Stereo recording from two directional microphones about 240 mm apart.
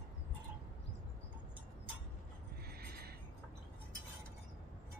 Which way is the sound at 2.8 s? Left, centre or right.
Right.